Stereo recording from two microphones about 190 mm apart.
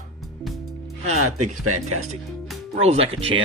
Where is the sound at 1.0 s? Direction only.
35° right (ahead or behind).